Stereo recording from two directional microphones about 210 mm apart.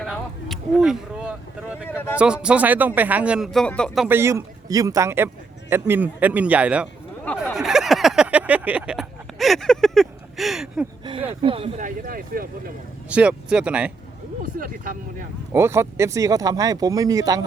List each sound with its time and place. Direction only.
0.0 s a sound: centre (ahead or behind)
2.1 s speech: 5° right (ahead or behind)
7.5 s a sound: centre (ahead or behind)
11.3 s speech: 25° right (ahead or behind)
11.8 s speech: 40° right (ahead or behind)
13.1 s speech: 5° right (ahead or behind)
14.4 s speech: 40° right (ahead or behind)
15.5 s speech: 15° right (ahead or behind)